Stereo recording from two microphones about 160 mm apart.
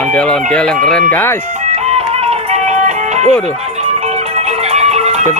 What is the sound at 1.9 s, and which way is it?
Music, 45° right (ahead or behind).